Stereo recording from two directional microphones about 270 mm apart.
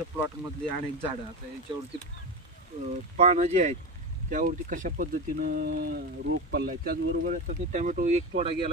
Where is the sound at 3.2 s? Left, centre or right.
Right.